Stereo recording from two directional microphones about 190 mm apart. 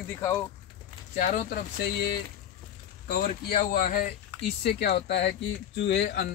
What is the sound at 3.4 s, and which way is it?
Speech, 40° left (ahead or behind).